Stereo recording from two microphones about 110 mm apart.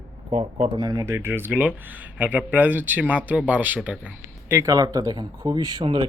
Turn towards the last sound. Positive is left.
turn(degrees=-40)  # may be behind; listen again after turning